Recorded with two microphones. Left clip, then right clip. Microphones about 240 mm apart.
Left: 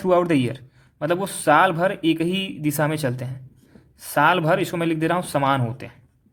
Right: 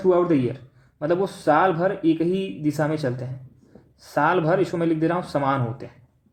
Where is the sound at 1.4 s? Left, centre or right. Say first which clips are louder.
Left 3 dB; left.